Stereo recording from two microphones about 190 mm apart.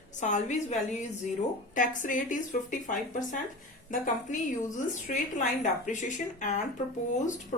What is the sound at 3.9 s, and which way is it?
Speech, 40° left (ahead or behind).